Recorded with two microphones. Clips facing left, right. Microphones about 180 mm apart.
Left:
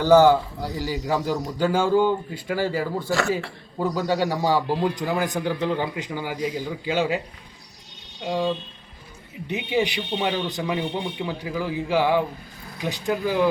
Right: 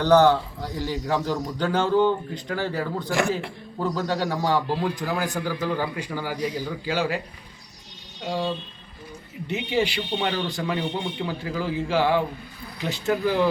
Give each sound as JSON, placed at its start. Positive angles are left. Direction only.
{"t": 0.0, "sound": "a man's voice", "side_deg": 10}
{"t": 8.2, "sound": "a man's voice", "side_deg": 15}